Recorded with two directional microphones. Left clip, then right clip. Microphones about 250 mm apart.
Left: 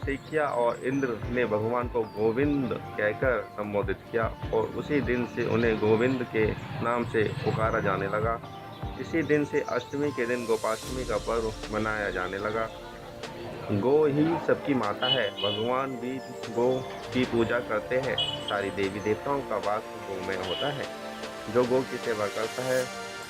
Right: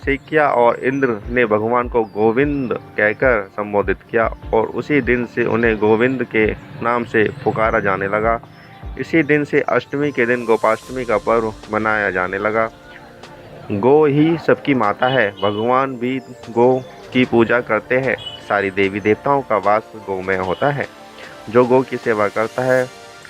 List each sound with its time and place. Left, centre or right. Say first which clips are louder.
0.0 s speech: right 13 dB; centre
13.8 s speech: right 11 dB; centre
21.5 s speech: right 12 dB; centre